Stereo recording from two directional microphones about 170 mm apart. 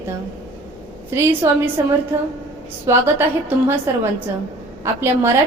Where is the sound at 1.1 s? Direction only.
15° right (ahead or behind).